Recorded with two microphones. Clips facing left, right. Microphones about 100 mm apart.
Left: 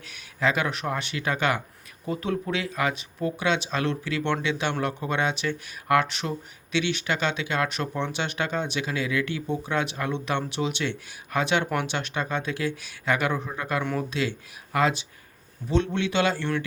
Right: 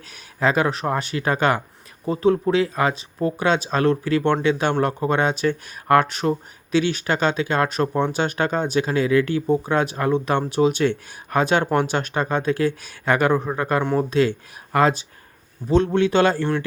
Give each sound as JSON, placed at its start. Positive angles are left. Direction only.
{"t": 0.1, "sound": "speech", "side_deg": -40}